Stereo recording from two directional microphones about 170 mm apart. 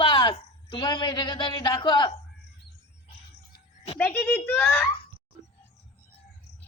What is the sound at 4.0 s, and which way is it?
Speech, 10° left (ahead or behind).